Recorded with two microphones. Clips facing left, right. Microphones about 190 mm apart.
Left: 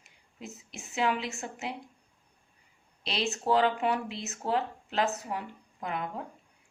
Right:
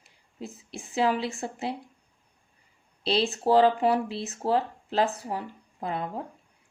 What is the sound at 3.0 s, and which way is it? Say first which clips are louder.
Speech: right 6 dB; 30° right (ahead or behind).